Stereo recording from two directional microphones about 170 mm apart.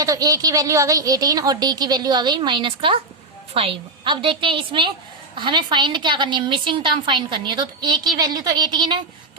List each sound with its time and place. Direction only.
0.0 s a woman's voice: 20° right (ahead or behind)